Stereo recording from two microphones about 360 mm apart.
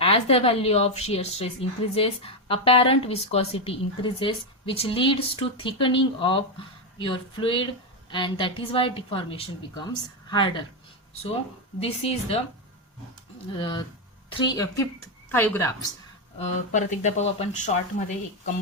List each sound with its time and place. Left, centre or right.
0.0 s a woman's voice: centre
11.8 s a woman's voice: centre
13.6 s a woman's voice: centre
16.5 s speech: centre